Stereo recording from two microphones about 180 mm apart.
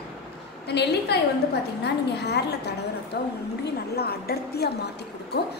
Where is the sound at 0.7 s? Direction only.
65° left (ahead or behind).